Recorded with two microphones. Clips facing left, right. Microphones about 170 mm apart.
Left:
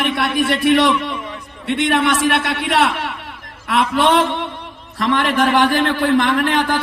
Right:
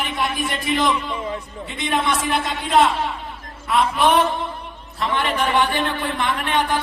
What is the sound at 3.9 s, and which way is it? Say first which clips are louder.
A man's voice: left 4 dB; 90° left.